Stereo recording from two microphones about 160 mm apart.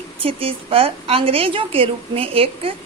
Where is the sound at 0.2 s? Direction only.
35° right (ahead or behind).